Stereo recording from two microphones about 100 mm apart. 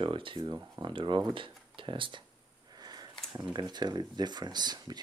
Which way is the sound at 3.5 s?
45° right (ahead or behind).